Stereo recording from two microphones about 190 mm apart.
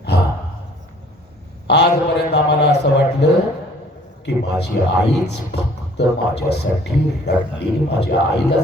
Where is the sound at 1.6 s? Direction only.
60° left (ahead or behind).